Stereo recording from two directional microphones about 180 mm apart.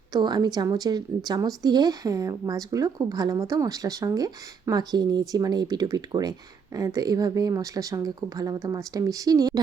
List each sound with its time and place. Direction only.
0.1 s a woman's voice: 25° right (ahead or behind)